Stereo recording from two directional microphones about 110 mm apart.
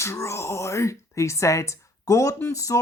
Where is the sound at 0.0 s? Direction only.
25° left (ahead or behind).